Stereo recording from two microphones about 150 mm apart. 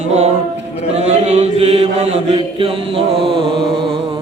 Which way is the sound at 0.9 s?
45° right (ahead or behind).